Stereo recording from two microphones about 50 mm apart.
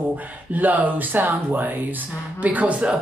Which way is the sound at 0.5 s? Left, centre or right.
Right.